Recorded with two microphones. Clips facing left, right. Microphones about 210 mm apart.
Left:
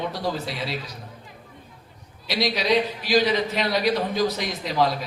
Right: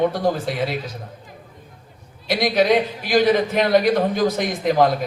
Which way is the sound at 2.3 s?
50° right (ahead or behind).